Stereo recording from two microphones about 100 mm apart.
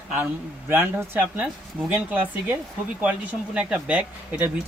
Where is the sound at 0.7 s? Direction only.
20° right (ahead or behind).